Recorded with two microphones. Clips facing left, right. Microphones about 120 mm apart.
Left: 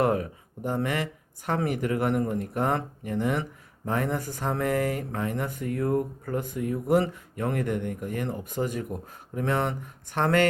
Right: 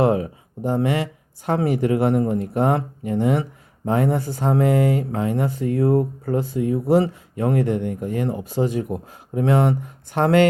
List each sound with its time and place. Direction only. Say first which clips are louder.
0.0 s speech: right 6 dB; 20° right (ahead or behind)
10.2 s speech: right 6 dB; 35° right (ahead or behind)